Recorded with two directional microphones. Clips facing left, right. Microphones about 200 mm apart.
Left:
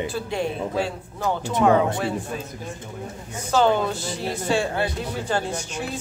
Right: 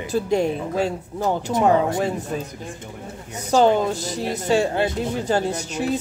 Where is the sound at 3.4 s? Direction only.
40° right (ahead or behind).